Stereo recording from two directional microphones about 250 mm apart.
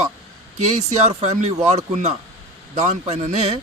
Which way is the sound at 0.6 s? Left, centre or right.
Right.